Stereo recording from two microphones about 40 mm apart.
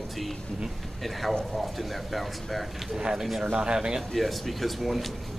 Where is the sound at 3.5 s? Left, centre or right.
Right.